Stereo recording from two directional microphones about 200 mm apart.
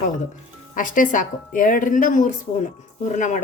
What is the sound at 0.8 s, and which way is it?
Speech, 40° left (ahead or behind).